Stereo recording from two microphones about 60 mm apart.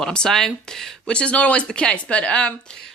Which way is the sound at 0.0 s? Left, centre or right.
Centre.